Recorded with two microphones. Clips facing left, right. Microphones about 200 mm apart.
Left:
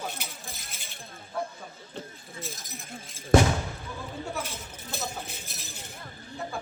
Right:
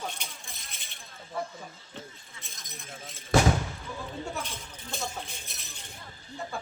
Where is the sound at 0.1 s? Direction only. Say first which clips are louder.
Left 3 dB; 5° left (ahead or behind).